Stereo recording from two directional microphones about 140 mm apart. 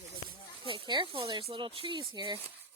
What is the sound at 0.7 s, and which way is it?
Speech, 35° right (ahead or behind).